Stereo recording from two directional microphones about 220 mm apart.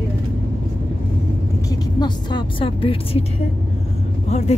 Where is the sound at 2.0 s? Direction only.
20° left (ahead or behind).